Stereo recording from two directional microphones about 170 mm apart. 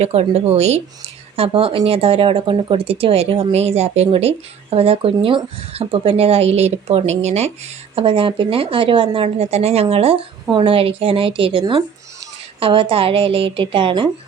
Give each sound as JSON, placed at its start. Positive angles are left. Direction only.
{"t": 0.0, "sound": "speech", "side_deg": -35}